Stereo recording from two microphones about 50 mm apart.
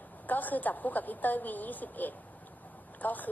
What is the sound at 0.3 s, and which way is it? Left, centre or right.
Speech, left.